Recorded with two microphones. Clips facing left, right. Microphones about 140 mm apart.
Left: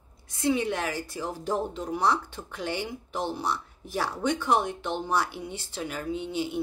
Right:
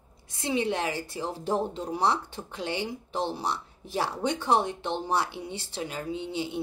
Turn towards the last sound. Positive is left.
turn(degrees=-25)  # may be behind; listen again after turning